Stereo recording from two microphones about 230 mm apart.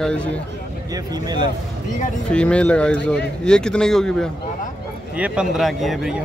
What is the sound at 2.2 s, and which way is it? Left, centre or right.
A man's voice, centre.